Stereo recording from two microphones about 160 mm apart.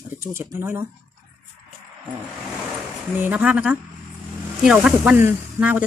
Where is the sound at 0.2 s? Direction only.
15° right (ahead or behind).